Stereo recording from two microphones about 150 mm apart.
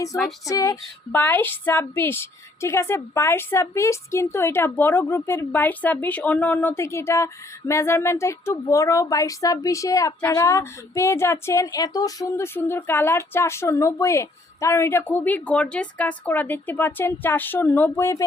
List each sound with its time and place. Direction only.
0.4 s speech: 25° left (ahead or behind)
1.1 s speech: 10° left (ahead or behind)